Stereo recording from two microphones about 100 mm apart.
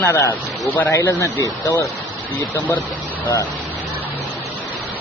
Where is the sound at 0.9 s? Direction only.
30° left (ahead or behind).